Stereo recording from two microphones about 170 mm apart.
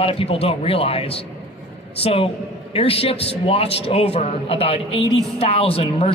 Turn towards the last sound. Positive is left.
turn(degrees=35)  # may be behind; listen again after turning